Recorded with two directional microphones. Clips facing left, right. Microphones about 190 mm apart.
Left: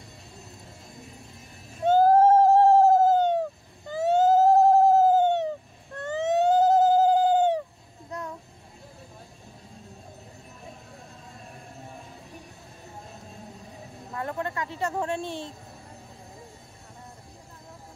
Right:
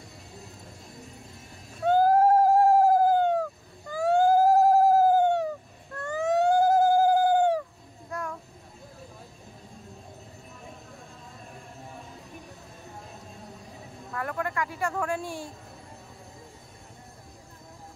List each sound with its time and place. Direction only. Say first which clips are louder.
1.8 s a sound: left 2 dB; 25° left (ahead or behind)
8.1 s child singing: right 1 dB; 20° left (ahead or behind)
14.1 s speech: even; 25° left (ahead or behind)